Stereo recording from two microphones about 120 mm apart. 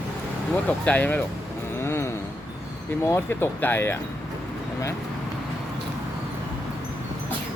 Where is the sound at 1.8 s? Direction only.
20° left (ahead or behind).